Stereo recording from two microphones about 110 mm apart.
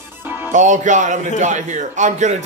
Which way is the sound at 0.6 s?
90° right.